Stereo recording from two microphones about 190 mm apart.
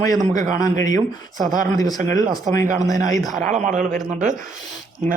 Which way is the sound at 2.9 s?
40° right (ahead or behind).